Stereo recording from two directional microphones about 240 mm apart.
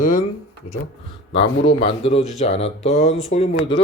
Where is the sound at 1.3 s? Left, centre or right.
Left.